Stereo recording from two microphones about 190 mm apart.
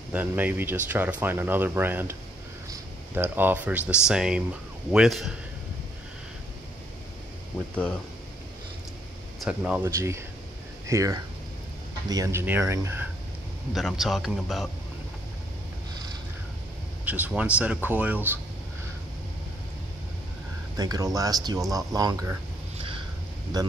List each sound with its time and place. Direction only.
0.1 s a man's voice: 10° right (ahead or behind)
9.4 s speech: 5° right (ahead or behind)
13.7 s a man's voice: centre (ahead or behind)
17.0 s speech: 10° right (ahead or behind)
20.7 s speech: 20° right (ahead or behind)
23.5 s speech: 20° right (ahead or behind)